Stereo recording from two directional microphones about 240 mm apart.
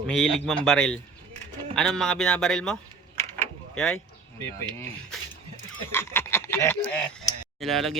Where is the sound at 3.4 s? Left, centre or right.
Centre.